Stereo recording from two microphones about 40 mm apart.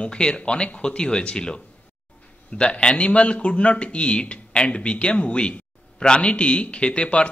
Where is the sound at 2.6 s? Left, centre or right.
Left.